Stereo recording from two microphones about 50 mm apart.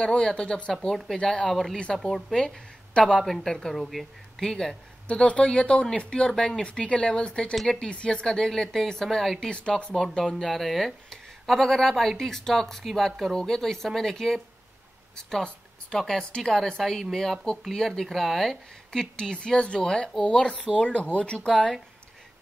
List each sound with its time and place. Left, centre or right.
0.0 s speech: centre
1.5 s speech: centre
5.0 s speech: left
7.5 s speech: centre
7.8 s speech: left
9.5 s speech: left
10.0 s speech: centre
18.9 s speech: centre